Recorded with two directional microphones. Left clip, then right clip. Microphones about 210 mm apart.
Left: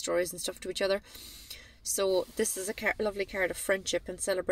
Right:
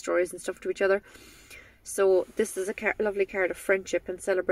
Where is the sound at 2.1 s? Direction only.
30° left (ahead or behind).